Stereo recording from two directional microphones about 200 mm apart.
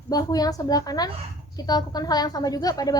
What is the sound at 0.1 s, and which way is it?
A woman's voice, 20° left (ahead or behind).